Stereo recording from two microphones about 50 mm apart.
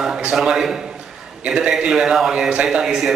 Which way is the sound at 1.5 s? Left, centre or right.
Centre.